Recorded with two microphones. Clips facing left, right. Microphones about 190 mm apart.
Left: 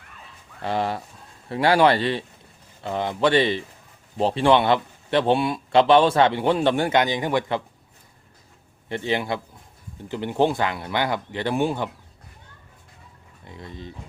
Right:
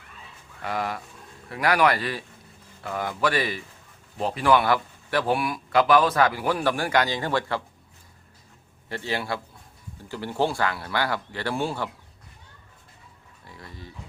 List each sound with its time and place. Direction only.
0.6 s speech: 30° left (ahead or behind)
8.9 s speech: 20° left (ahead or behind)
13.4 s speech: 20° left (ahead or behind)